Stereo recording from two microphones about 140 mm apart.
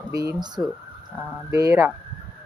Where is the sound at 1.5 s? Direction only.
25° right (ahead or behind).